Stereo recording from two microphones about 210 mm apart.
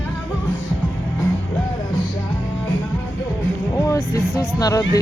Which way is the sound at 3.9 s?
15° left (ahead or behind).